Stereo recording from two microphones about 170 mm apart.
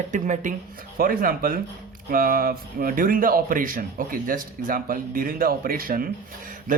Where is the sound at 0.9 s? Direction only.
55° right (ahead or behind).